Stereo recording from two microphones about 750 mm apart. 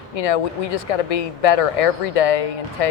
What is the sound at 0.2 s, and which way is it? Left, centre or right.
Speech, left.